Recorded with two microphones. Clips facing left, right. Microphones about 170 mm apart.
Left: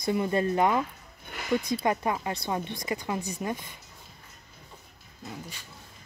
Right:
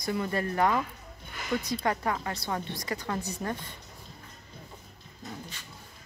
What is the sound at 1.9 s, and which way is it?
A woman's voice, 20° left (ahead or behind).